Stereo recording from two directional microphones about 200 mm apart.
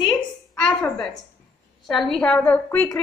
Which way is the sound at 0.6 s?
5° left (ahead or behind).